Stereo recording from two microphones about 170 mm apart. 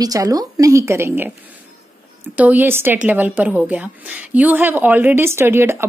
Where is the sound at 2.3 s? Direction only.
10° right (ahead or behind).